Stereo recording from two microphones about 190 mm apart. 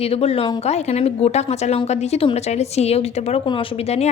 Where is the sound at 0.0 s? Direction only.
30° left (ahead or behind).